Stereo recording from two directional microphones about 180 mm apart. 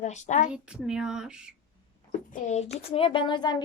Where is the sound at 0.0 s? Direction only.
40° left (ahead or behind).